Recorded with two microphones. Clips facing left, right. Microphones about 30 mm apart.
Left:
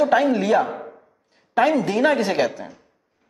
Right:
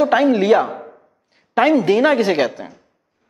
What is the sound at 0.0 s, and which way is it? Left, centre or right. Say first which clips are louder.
Speech: right 3 dB; right.